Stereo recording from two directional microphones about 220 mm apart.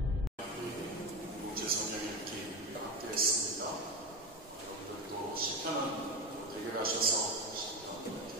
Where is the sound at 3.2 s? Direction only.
40° right (ahead or behind).